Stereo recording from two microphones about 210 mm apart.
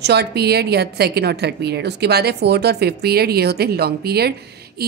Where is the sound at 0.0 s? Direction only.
50° right (ahead or behind).